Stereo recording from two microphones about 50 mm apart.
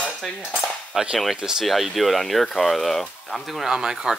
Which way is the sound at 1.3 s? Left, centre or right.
Centre.